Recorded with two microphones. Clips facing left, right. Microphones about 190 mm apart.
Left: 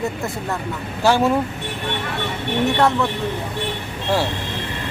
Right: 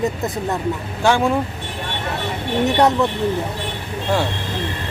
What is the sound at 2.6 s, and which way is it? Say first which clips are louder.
Speech: right 2 dB; 20° right (ahead or behind).